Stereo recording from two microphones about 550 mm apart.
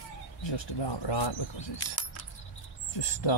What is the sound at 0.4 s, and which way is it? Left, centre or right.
Speech, left.